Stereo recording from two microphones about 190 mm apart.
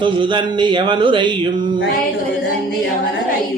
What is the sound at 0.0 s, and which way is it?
Speech, 25° right (ahead or behind).